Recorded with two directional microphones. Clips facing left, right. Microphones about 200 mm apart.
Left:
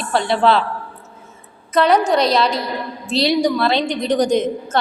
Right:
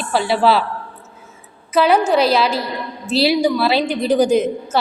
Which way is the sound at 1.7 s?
5° right (ahead or behind).